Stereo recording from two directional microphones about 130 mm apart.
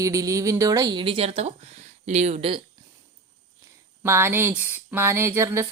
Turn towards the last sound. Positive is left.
turn(degrees=-20)  # may be behind; listen again after turning